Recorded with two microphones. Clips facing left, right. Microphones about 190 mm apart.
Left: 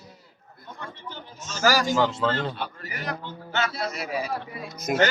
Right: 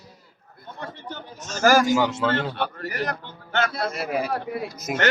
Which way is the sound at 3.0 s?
55° right (ahead or behind).